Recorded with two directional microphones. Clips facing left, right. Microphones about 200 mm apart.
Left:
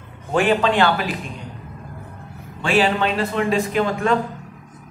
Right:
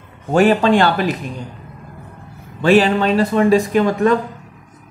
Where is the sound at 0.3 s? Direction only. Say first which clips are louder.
Right 5 dB; 40° right (ahead or behind).